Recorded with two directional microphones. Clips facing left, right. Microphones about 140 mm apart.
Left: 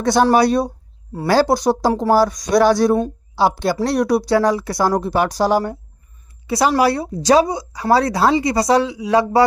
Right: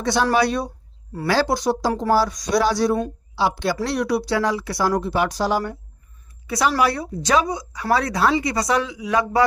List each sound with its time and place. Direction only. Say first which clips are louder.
0.0 s speech: left 5 dB; 45° left (ahead or behind)
6.5 s speech: left 4 dB; 30° left (ahead or behind)